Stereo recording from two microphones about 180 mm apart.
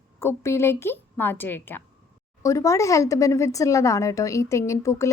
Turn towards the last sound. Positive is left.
turn(degrees=15)  # may be behind; listen again after turning